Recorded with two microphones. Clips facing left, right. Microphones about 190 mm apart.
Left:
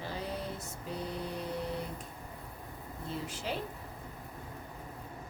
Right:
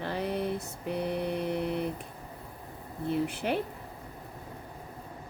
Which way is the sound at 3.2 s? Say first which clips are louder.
Right 7 dB; 60° right (ahead or behind).